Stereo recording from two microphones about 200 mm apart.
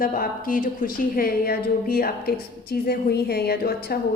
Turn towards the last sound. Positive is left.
turn(degrees=50)  # may be behind; listen again after turning